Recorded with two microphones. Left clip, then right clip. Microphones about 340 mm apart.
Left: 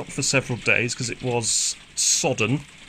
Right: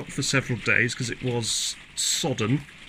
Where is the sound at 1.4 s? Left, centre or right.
Left.